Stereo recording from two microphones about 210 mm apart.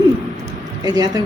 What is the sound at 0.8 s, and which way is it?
Speech, 20° right (ahead or behind).